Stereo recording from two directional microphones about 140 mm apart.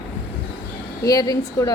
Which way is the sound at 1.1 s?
25° left (ahead or behind).